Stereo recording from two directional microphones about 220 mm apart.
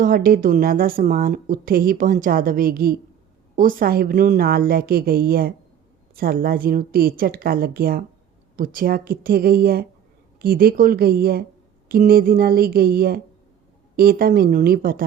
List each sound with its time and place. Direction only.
0.0 s a woman's voice: 40° right (ahead or behind)